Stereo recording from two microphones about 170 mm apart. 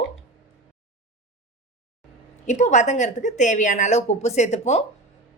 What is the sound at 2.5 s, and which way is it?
A woman's voice, 45° left (ahead or behind).